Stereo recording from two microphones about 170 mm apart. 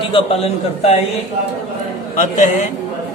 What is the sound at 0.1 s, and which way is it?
Speech, 35° left (ahead or behind).